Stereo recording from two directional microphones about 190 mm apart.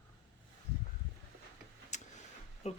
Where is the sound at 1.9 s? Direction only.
40° left (ahead or behind).